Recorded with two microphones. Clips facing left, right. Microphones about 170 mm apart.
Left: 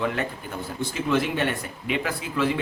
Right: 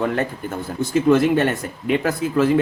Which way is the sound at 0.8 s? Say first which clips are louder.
Right 9 dB; 45° right (ahead or behind).